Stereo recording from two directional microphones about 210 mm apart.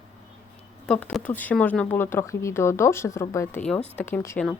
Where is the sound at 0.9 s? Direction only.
5° left (ahead or behind).